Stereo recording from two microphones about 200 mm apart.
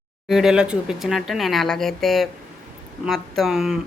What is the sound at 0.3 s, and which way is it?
Speech, centre (ahead or behind).